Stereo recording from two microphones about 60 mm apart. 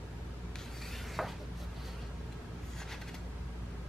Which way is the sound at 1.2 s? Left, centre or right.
Centre.